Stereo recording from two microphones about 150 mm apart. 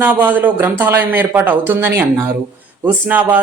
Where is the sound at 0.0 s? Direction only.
10° right (ahead or behind).